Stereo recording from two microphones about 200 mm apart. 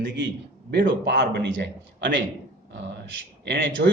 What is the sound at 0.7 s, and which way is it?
A man's voice, 60° right (ahead or behind).